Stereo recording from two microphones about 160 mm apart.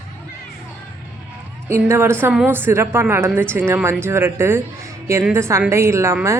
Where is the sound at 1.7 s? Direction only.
15° right (ahead or behind).